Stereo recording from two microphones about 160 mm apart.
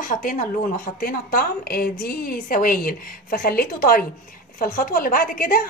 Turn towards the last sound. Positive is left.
turn(degrees=60)  # may be behind; listen again after turning